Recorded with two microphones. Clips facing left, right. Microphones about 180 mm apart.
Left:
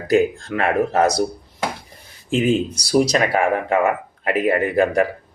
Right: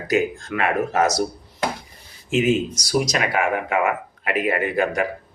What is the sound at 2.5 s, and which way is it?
Speech, 30° left (ahead or behind).